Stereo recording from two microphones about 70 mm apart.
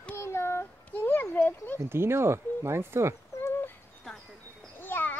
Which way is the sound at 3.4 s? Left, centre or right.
Left.